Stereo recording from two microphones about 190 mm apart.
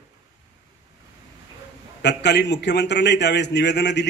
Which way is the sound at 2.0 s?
65° left (ahead or behind).